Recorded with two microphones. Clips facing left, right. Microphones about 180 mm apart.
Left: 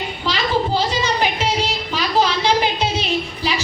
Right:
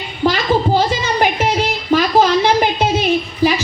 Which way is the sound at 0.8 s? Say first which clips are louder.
Right 4 dB; 50° right (ahead or behind).